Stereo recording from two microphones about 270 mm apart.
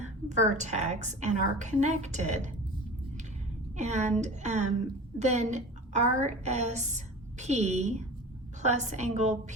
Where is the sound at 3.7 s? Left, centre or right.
Right.